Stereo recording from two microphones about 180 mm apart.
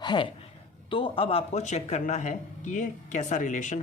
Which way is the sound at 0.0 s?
25° left (ahead or behind).